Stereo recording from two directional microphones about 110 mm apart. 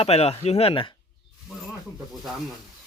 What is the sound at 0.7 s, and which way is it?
Speech, 50° left (ahead or behind).